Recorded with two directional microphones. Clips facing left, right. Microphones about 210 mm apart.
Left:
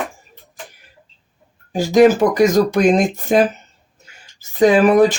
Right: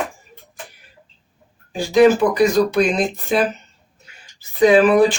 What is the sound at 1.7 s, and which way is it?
Speech, 45° left (ahead or behind).